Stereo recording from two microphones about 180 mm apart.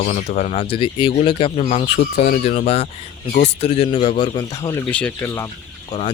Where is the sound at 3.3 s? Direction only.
55° left (ahead or behind).